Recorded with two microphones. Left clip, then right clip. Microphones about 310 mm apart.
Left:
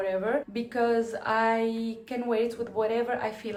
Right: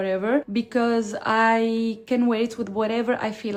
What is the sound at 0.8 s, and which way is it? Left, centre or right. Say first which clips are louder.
Speech: right 2 dB; right.